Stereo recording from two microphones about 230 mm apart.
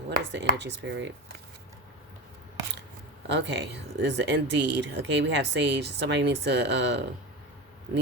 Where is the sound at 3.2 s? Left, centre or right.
Right.